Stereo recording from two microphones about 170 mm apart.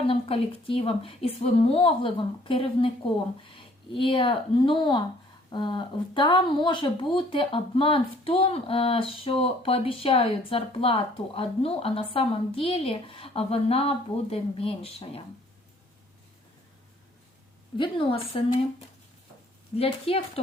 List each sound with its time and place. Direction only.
0.1 s speech: 35° left (ahead or behind)
17.7 s speech: 30° left (ahead or behind)
19.7 s speech: 35° left (ahead or behind)